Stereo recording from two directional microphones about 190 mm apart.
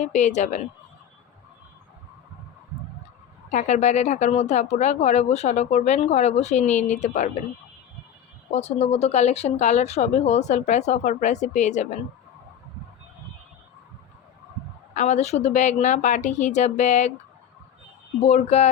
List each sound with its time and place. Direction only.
0.0 s speech: 40° left (ahead or behind)
3.5 s speech: 40° left (ahead or behind)
8.5 s speech: 35° left (ahead or behind)
14.9 s speech: 40° left (ahead or behind)
18.2 s speech: 35° left (ahead or behind)